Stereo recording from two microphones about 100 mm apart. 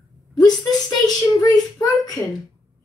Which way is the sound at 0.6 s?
40° left (ahead or behind).